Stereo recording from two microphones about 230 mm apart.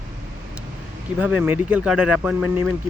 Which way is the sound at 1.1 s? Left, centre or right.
Centre.